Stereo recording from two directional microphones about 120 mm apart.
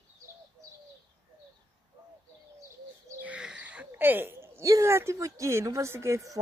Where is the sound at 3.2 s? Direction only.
10° right (ahead or behind).